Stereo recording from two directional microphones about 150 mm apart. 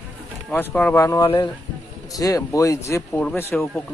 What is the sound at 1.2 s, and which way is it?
Speech, 30° left (ahead or behind).